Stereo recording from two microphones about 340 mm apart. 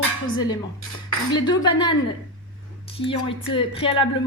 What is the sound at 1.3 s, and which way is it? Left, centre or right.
Dishes, centre.